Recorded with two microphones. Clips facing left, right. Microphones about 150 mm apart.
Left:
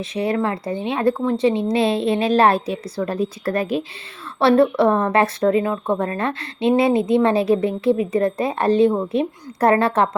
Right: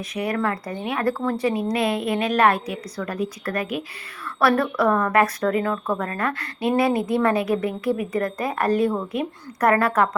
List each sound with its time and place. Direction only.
0.0 s speech: 25° left (ahead or behind)